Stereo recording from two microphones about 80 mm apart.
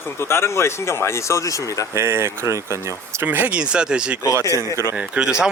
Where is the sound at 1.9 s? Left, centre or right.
Right.